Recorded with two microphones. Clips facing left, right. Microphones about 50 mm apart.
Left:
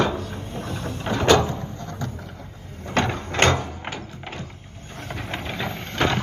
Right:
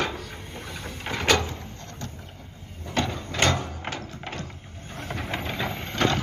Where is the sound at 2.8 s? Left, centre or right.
Left.